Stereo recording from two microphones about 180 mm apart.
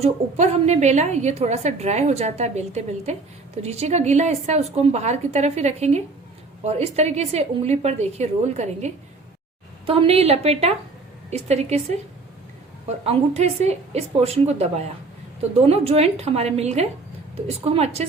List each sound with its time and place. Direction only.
0.0 s a woman's voice: 40° right (ahead or behind)
13.1 s a woman's voice: 35° right (ahead or behind)